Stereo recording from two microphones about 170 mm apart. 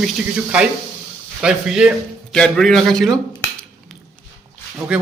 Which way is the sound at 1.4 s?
5° right (ahead or behind).